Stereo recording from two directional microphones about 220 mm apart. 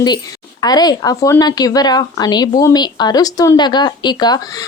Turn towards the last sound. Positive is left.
turn(degrees=15)  # may be behind; listen again after turning